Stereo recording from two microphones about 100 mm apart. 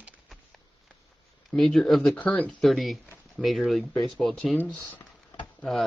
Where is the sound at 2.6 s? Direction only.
Centre (ahead or behind).